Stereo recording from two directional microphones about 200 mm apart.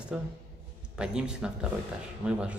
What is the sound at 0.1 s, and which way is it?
A man's voice, centre (ahead or behind).